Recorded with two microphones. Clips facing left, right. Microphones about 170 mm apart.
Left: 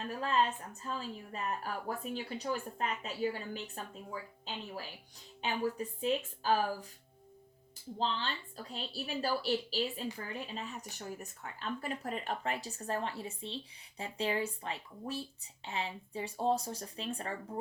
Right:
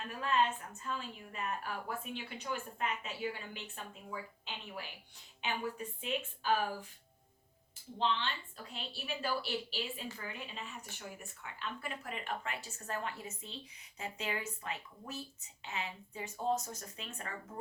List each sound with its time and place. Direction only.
0.1 s a woman's voice: 35° left (ahead or behind)
7.9 s a woman's voice: 35° left (ahead or behind)